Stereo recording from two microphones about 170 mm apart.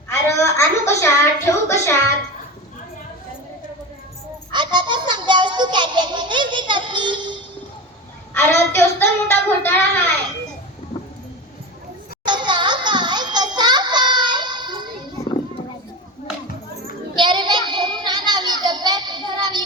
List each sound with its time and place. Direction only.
0.4 s a woman's voice: 15° left (ahead or behind)
4.5 s music: 25° right (ahead or behind)
8.3 s a woman's voice: 15° left (ahead or behind)
10.9 s a sound: 30° left (ahead or behind)
12.2 s music: 25° right (ahead or behind)
17.2 s child singing: 25° right (ahead or behind)